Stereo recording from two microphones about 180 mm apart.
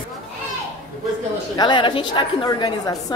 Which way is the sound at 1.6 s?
25° left (ahead or behind).